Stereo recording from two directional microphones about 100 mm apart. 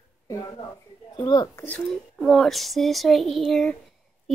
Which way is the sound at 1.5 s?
20° left (ahead or behind).